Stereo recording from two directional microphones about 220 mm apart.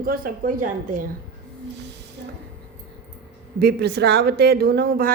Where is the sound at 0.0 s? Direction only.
40° right (ahead or behind).